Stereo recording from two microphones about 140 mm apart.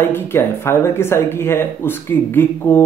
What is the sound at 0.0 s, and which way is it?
Speech, 15° left (ahead or behind).